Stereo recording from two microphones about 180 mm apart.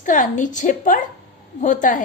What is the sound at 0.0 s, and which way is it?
A woman's voice, 45° left (ahead or behind).